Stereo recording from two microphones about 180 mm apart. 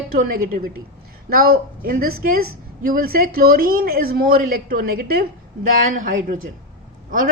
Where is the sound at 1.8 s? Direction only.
55° right (ahead or behind).